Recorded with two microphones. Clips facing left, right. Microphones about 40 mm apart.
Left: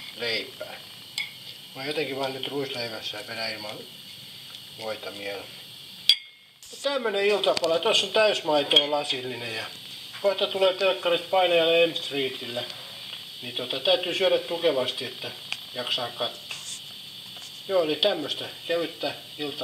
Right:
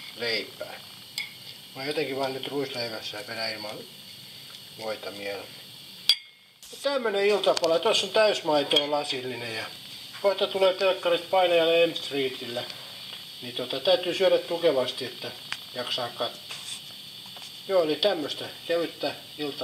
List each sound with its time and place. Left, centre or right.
0.2 s speech: left
1.2 s stir: left
1.8 s speech: left
4.8 s speech: centre
6.8 s speech: left
7.2 s speech: centre
17.6 s speech: centre